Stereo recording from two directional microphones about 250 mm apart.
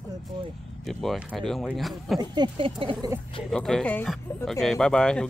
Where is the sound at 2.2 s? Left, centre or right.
Centre.